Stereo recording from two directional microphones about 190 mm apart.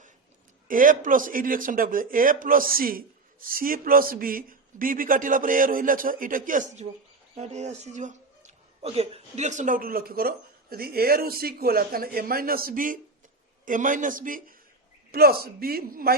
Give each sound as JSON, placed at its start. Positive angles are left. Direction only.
{"t": 0.7, "sound": "speech", "side_deg": -45}